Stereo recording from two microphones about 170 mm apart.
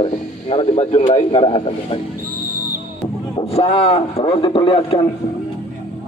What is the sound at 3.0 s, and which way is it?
Speech, 30° left (ahead or behind).